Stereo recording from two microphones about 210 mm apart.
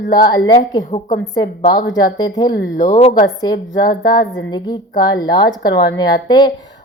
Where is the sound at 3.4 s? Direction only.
20° left (ahead or behind).